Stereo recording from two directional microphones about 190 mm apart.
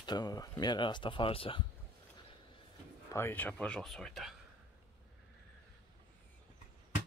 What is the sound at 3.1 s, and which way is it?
Speech, 10° left (ahead or behind).